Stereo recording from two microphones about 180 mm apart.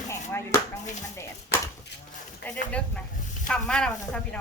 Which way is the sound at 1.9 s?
70° left (ahead or behind).